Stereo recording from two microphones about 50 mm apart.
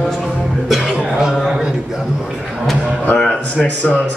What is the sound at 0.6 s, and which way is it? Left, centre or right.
Cough, centre.